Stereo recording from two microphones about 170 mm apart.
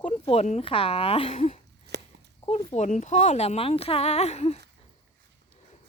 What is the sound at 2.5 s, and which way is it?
Speech, 35° left (ahead or behind).